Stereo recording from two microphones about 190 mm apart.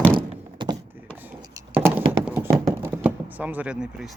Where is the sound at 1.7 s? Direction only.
10° right (ahead or behind).